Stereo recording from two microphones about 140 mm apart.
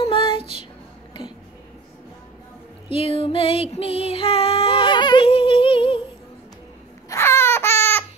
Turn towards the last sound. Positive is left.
turn(degrees=15)  # may be behind; listen again after turning